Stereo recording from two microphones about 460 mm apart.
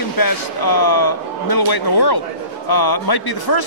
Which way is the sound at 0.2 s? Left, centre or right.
Left.